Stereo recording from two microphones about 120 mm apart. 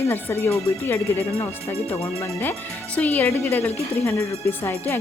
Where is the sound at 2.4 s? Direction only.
15° left (ahead or behind).